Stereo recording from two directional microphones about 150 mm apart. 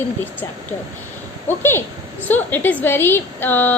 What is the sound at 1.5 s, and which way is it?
A woman's voice, 15° left (ahead or behind).